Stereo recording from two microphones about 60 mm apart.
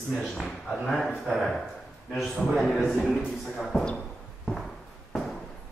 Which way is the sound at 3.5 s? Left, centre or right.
Centre.